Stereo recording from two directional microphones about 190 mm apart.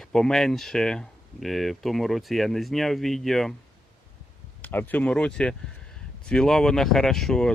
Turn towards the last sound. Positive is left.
turn(degrees=0)  # may be behind; listen again after turning